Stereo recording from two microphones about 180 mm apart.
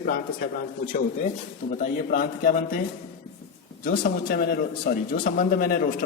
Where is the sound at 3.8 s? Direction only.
50° left (ahead or behind).